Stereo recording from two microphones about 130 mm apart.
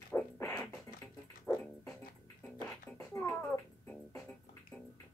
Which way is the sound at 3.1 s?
20° left (ahead or behind).